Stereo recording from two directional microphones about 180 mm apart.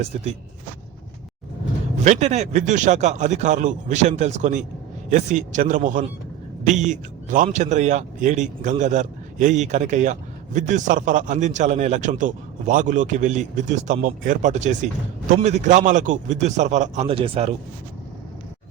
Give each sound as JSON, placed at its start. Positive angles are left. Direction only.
{"t": 2.0, "sound": "a man's voice", "side_deg": -40}